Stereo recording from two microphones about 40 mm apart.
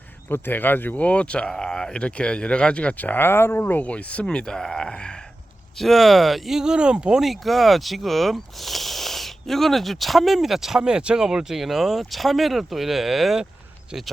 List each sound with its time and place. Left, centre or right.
0.3 s speech: left
0.9 s a man's voice: left
1.5 s a man's voice: centre
3.2 s speech: left
3.8 s a man's voice: left
5.7 s speech: centre
6.6 s speech: right
7.2 s speech: centre
10.8 s speech: centre